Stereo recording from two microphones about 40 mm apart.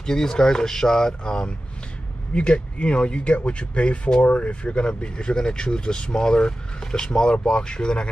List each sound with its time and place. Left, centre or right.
0.0 s speech: centre